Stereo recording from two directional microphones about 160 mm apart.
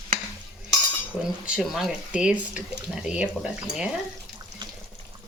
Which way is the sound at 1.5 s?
Centre (ahead or behind).